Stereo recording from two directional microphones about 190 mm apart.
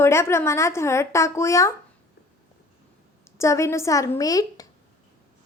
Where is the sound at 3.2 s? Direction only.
15° left (ahead or behind).